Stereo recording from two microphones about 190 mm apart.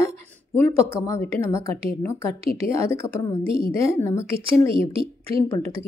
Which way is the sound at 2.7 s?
15° left (ahead or behind).